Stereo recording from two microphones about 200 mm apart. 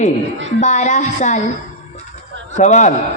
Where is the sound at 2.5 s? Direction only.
35° left (ahead or behind).